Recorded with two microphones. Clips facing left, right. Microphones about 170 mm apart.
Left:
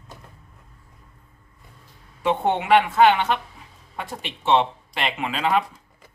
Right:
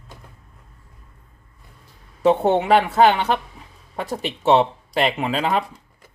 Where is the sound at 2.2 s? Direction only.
40° right (ahead or behind).